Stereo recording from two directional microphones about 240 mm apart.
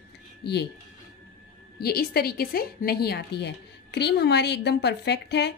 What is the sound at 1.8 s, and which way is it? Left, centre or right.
A woman's voice, left.